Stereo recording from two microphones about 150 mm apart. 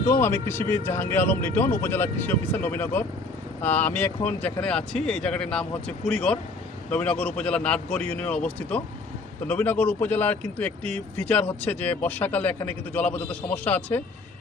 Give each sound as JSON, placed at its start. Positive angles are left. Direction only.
{"t": 0.0, "sound": "speech", "side_deg": 15}